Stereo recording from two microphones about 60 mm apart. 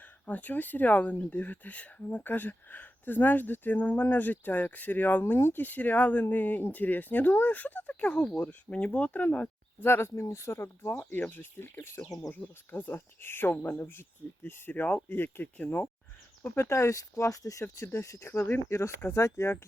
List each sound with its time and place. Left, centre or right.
0.3 s speech: left
5.3 s speech: left
5.5 s speech: left
8.0 s speech: centre
9.8 s speech: left
14.4 s speech: left
16.6 s speech: left